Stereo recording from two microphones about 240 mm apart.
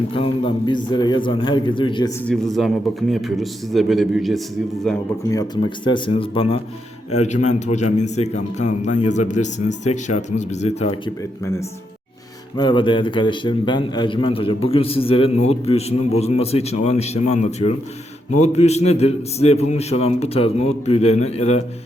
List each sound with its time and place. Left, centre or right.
0.1 s a man's voice: left
2.2 s a man's voice: centre
5.3 s a man's voice: centre
12.5 s a man's voice: centre